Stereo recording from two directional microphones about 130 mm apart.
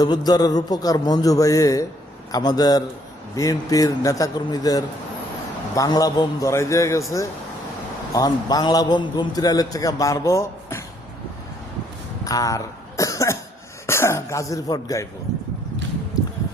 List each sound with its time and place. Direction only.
0.0 s a man's voice: 30° left (ahead or behind)
8.1 s a man's voice: 30° left (ahead or behind)
12.2 s cough: 25° left (ahead or behind)
13.8 s a man's voice: 20° left (ahead or behind)
16.1 s music: 30° left (ahead or behind)